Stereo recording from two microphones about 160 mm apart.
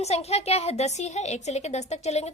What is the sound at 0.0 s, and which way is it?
A woman's voice, 40° left (ahead or behind).